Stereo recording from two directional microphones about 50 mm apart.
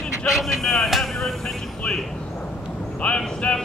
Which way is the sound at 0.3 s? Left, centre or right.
Centre.